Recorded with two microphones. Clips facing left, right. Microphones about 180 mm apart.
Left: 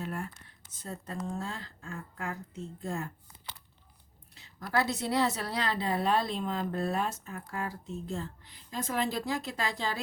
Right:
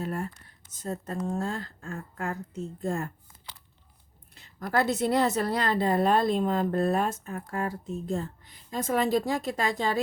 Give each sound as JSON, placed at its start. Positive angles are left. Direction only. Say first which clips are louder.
{"t": 0.0, "sound": "a sound", "louder": "right 5 dB", "side_deg": -40}
{"t": 0.7, "sound": "a woman's voice", "louder": "right 6 dB", "side_deg": -45}
{"t": 4.4, "sound": "a woman's voice", "louder": "right 4 dB", "side_deg": -50}